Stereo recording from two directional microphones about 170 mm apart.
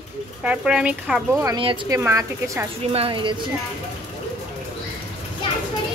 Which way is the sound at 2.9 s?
30° right (ahead or behind).